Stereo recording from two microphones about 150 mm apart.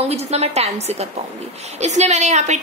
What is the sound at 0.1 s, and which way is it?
A woman's voice, 45° right (ahead or behind).